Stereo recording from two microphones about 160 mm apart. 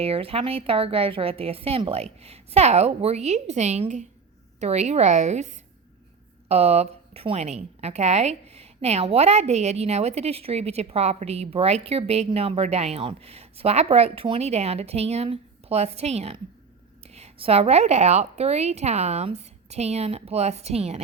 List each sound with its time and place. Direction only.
0.0 s a woman's voice: 35° right (ahead or behind)